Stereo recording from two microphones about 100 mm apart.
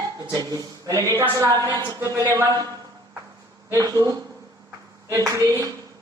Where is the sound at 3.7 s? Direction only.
35° right (ahead or behind).